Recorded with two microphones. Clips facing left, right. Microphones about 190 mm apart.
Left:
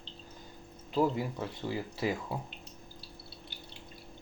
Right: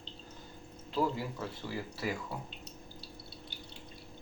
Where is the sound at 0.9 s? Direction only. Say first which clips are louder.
Left 3 dB; 25° left (ahead or behind).